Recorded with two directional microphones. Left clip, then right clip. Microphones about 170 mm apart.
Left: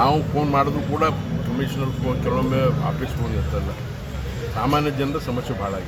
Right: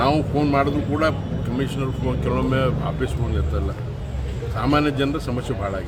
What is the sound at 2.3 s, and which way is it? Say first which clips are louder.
Speech: left 1 dB; 25° right (ahead or behind).